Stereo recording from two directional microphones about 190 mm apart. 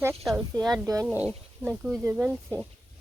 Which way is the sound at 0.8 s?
15° right (ahead or behind).